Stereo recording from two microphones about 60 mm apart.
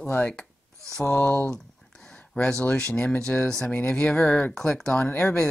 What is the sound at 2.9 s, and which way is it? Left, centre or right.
Speech, centre.